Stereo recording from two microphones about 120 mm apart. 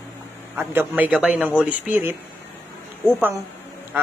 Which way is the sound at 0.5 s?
15° right (ahead or behind).